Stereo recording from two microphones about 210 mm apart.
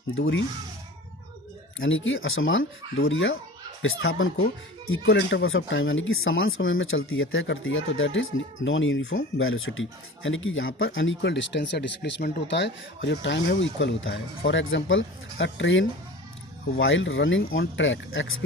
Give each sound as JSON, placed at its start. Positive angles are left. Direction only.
{"t": 0.1, "sound": "speech", "side_deg": 65}
{"t": 1.8, "sound": "speech", "side_deg": 65}